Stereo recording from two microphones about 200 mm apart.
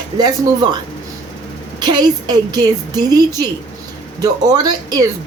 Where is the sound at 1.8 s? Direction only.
20° right (ahead or behind).